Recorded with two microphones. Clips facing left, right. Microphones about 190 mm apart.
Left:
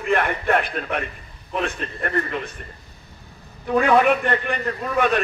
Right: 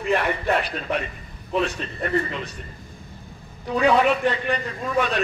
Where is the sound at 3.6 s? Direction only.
55° left (ahead or behind).